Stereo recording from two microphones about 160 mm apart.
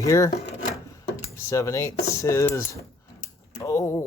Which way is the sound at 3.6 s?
20° left (ahead or behind).